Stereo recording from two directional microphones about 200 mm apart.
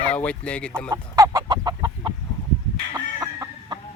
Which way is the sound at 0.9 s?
15° right (ahead or behind).